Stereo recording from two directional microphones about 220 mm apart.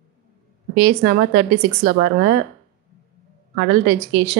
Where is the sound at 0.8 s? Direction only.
50° right (ahead or behind).